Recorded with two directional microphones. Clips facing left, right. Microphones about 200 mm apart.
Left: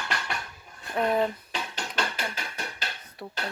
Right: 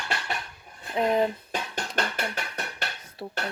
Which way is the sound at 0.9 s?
20° right (ahead or behind).